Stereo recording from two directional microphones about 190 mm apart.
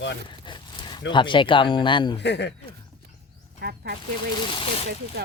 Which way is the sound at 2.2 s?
65° left (ahead or behind).